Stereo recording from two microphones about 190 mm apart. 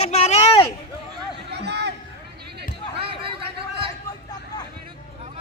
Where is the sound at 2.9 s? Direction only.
30° right (ahead or behind).